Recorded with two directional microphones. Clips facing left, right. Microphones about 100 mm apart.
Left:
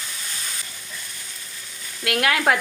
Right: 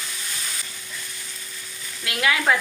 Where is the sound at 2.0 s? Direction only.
55° left (ahead or behind).